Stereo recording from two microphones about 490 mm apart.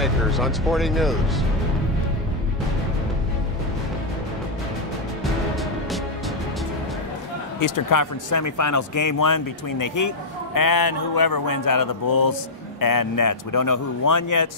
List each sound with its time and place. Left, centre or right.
0.0 s speech: centre
5.2 s music: centre
7.6 s speech: left